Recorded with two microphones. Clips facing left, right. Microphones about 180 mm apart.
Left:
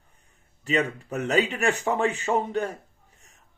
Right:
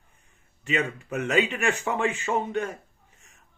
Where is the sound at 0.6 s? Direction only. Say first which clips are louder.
Left 2 dB; 35° left (ahead or behind).